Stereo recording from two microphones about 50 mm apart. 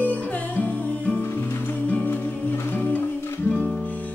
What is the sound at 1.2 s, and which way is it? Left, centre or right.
Music, left.